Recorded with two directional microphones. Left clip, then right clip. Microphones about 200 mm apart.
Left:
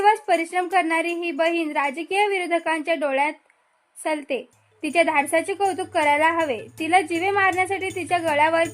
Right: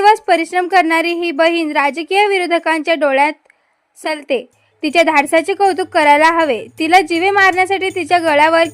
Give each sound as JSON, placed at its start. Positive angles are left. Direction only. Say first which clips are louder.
{"t": 0.0, "sound": "a woman's voice", "louder": "right 8 dB", "side_deg": -30}